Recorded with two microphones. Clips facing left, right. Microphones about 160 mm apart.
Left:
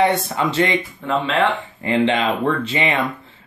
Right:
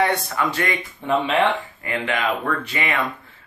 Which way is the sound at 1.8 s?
25° left (ahead or behind).